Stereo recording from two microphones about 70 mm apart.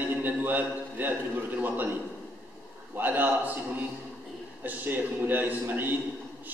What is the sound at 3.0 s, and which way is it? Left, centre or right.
Speech, right.